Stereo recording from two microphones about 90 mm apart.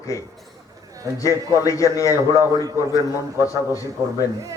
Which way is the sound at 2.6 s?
45° right (ahead or behind).